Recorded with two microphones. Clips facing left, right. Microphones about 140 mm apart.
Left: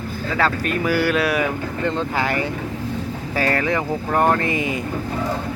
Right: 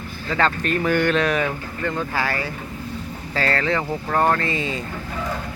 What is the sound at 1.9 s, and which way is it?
Speech, 20° left (ahead or behind).